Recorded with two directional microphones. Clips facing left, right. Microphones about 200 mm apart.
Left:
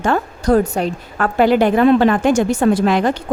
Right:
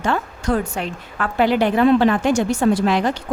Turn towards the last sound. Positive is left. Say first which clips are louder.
# left 3 dB
turn(degrees=50)  # may be behind; listen again after turning